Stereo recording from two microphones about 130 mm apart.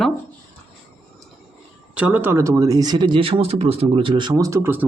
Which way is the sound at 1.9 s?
10° right (ahead or behind).